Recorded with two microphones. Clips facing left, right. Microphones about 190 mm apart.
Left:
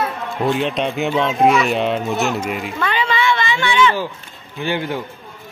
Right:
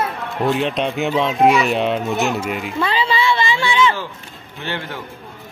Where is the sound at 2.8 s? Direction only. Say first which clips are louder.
Even; 30° right (ahead or behind).